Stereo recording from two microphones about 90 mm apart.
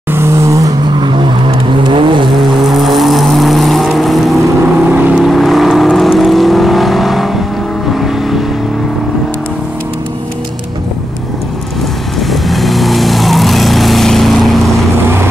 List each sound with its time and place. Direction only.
0.1 s vehicle: 30° right (ahead or behind)
1.9 s vehicle: 65° right (ahead or behind)
2.6 s vehicle: centre (ahead or behind)
4.8 s vehicle: 20° right (ahead or behind)
5.2 s vehicle: centre (ahead or behind)
12.2 s vehicle: centre (ahead or behind)
14.7 s vehicle: 30° right (ahead or behind)